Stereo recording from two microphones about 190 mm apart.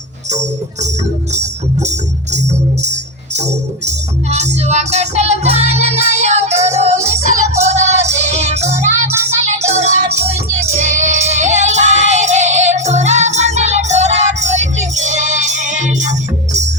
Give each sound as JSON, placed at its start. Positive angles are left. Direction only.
{"t": 0.3, "sound": "music", "side_deg": -40}
{"t": 3.8, "sound": "music", "side_deg": -35}